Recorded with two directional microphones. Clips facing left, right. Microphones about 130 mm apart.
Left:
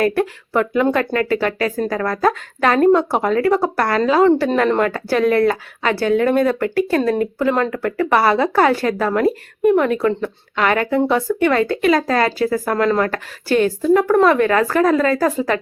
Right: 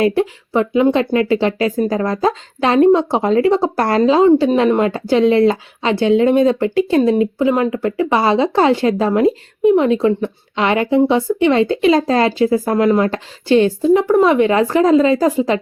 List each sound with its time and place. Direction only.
0.0 s speech: 20° right (ahead or behind)
14.1 s speech: 15° right (ahead or behind)